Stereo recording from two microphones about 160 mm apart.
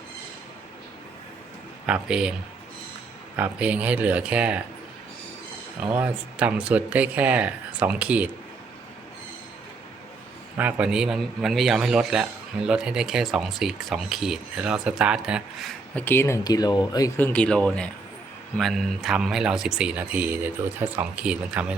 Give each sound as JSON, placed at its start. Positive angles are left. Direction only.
{"t": 1.9, "sound": "a man's voice", "side_deg": -5}
{"t": 3.3, "sound": "speech", "side_deg": -10}
{"t": 5.8, "sound": "speech", "side_deg": -10}
{"t": 10.6, "sound": "a man's voice", "side_deg": -10}
{"t": 16.0, "sound": "speech", "side_deg": 15}
{"t": 17.2, "sound": "speech", "side_deg": 10}